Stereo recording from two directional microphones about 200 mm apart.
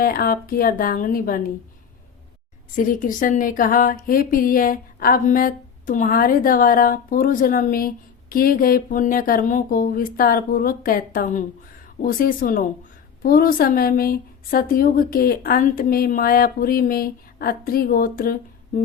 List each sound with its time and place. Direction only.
0.0 s speech: 50° left (ahead or behind)
2.7 s speech: 40° left (ahead or behind)